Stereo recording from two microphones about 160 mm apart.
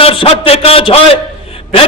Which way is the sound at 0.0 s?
35° left (ahead or behind).